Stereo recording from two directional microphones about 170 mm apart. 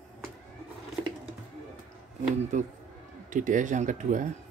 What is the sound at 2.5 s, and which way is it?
Speech, 45° right (ahead or behind).